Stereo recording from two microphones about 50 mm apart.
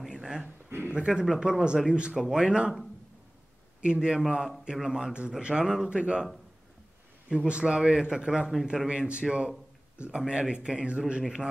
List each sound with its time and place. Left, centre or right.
0.0 s a sound: centre
0.7 s speech: right
0.9 s speech: centre
3.8 s speech: centre
7.2 s speech: right